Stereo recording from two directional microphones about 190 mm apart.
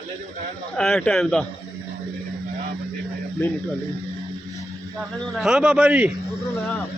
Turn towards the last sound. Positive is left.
turn(degrees=-5)  # may be behind; listen again after turning